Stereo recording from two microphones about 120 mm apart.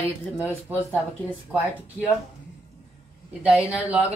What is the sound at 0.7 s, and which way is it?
Speech, 15° right (ahead or behind).